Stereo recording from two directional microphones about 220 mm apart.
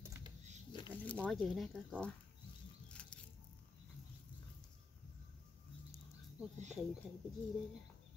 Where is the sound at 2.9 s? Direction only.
5° left (ahead or behind).